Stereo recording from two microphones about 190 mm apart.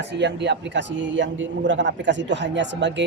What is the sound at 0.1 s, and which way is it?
A man's voice, 65° right (ahead or behind).